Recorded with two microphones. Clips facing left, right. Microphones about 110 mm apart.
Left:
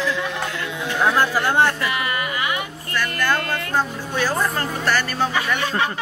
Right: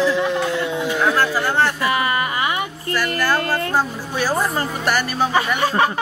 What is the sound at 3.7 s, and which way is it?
Speech, 10° right (ahead or behind).